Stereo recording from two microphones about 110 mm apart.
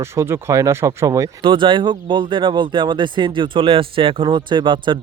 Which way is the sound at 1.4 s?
50° right (ahead or behind).